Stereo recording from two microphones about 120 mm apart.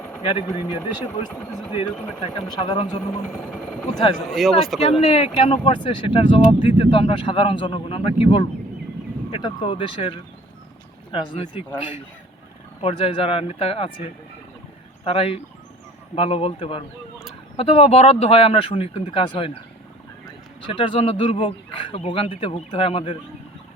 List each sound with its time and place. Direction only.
0.2 s speech: 45° left (ahead or behind)
2.2 s speech: 35° left (ahead or behind)
4.3 s speech: centre (ahead or behind)
4.8 s speech: 60° left (ahead or behind)
11.1 s speech: 40° left (ahead or behind)
12.8 s speech: 50° left (ahead or behind)
15.0 s speech: 55° left (ahead or behind)
20.7 s speech: 45° left (ahead or behind)